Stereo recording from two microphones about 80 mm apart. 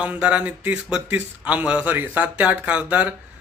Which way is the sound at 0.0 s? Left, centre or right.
Centre.